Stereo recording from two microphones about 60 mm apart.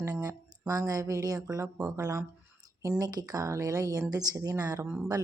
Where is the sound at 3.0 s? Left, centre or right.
Right.